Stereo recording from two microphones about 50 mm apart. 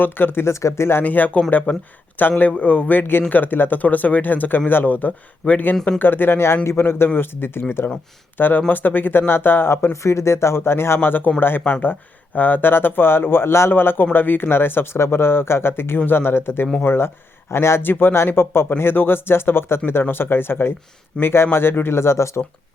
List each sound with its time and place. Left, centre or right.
0.0 s speech: left
0.4 s speech: left
1.0 s speech: left
9.9 s speech: left
13.7 s speech: left
17.5 s speech: left